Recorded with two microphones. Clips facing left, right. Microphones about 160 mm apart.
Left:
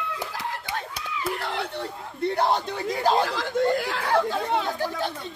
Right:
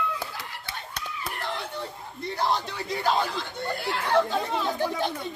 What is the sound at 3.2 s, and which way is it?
Snicker, 90° left.